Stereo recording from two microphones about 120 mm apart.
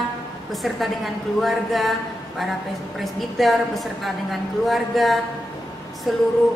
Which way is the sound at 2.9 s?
Centre (ahead or behind).